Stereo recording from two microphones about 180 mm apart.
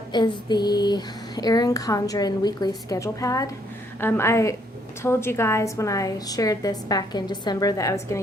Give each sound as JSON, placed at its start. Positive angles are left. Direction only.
{"t": 0.1, "sound": "a woman's voice", "side_deg": 25}